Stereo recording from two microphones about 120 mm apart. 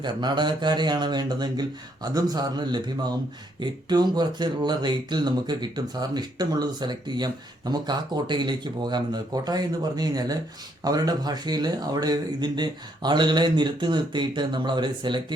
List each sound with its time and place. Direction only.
0.0 s speech: 40° right (ahead or behind)